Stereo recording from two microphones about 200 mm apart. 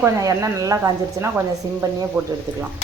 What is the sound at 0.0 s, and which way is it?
Speech, 15° right (ahead or behind).